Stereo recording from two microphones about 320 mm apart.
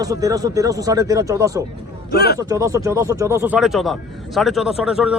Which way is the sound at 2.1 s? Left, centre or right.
Left.